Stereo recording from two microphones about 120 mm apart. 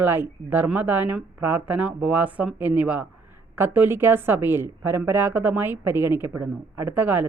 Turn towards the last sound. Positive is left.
turn(degrees=-15)  # may be behind; listen again after turning